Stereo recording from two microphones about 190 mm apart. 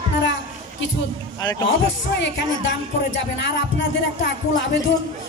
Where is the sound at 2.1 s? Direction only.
70° left (ahead or behind).